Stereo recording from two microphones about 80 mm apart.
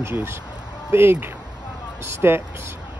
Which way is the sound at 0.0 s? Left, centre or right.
Right.